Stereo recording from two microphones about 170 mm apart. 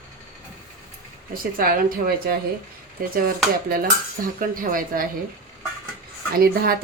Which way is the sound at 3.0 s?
55° right (ahead or behind).